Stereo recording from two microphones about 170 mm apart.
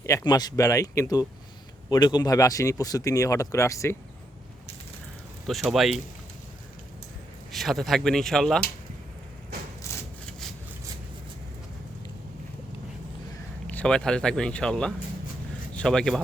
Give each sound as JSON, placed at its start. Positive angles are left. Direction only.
{"t": 0.0, "sound": "speech", "side_deg": 20}
{"t": 5.5, "sound": "speech", "side_deg": 0}
{"t": 7.5, "sound": "speech", "side_deg": 0}
{"t": 13.7, "sound": "speech", "side_deg": 5}